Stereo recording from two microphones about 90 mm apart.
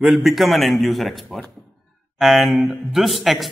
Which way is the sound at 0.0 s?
5° right (ahead or behind).